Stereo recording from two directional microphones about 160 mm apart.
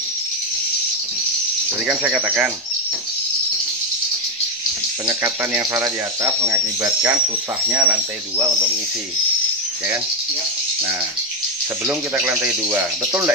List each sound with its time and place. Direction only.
1.9 s speech: 10° right (ahead or behind)
5.0 s speech: 20° right (ahead or behind)
11.9 s speech: 15° right (ahead or behind)